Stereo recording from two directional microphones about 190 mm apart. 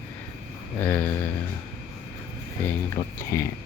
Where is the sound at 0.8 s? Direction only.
10° left (ahead or behind).